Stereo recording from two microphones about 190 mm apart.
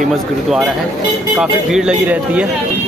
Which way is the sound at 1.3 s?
5° right (ahead or behind).